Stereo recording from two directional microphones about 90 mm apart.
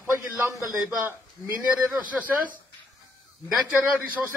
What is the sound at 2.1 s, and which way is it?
Speech, 15° right (ahead or behind).